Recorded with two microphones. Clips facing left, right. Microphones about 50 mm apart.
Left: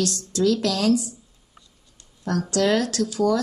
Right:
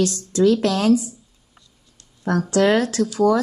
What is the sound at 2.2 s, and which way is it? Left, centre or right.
A woman's voice, right.